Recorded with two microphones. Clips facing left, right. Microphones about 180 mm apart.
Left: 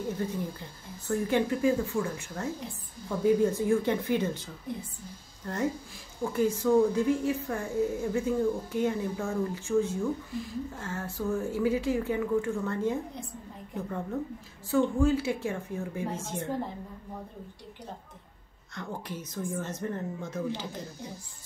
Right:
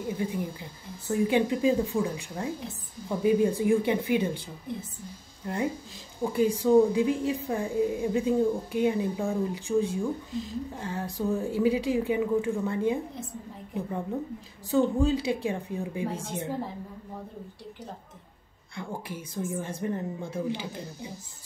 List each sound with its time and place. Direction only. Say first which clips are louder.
0.2 s a woman's voice: right 2 dB; 10° right (ahead or behind)
5.4 s a woman's voice: right 1 dB; 10° right (ahead or behind)
18.8 s a woman's voice: right 1 dB; 10° right (ahead or behind)